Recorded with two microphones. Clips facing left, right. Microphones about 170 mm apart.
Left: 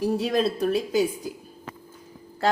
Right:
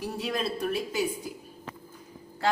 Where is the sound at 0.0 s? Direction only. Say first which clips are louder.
Left 8 dB; 40° left (ahead or behind).